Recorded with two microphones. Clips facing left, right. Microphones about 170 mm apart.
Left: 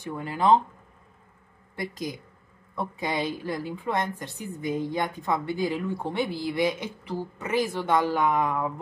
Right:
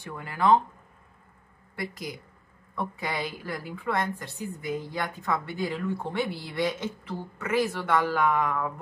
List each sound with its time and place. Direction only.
0.0 s a woman's voice: 20° left (ahead or behind)
1.8 s a woman's voice: 20° left (ahead or behind)